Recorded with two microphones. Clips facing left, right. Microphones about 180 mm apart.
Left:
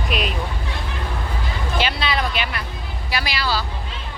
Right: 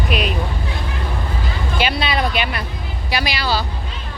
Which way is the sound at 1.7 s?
15° right (ahead or behind).